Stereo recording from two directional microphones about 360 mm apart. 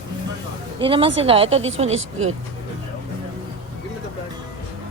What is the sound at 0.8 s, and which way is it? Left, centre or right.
Speech, centre.